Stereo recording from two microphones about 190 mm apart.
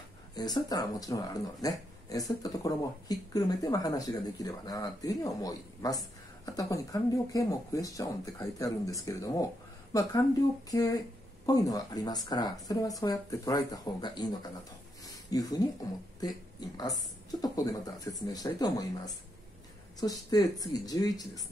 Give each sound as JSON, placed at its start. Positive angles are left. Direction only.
{"t": 0.3, "sound": "speech", "side_deg": 20}
{"t": 10.7, "sound": "speech", "side_deg": 20}